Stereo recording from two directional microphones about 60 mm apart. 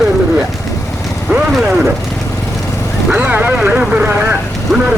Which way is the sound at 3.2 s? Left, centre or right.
Right.